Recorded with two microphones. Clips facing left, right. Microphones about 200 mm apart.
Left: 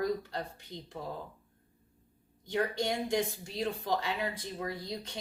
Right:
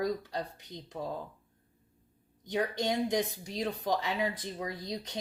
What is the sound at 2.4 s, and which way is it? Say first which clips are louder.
A woman's voice: even; 20° right (ahead or behind).